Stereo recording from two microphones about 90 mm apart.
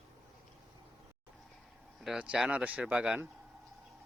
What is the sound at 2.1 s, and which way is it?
Speech, 15° right (ahead or behind).